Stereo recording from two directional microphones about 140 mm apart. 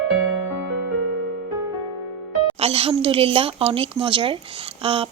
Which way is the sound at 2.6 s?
45° right (ahead or behind).